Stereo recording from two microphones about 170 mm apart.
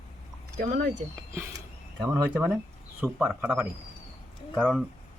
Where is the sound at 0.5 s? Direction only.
50° right (ahead or behind).